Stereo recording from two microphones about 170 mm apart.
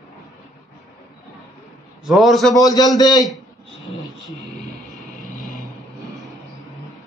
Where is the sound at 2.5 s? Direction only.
20° left (ahead or behind).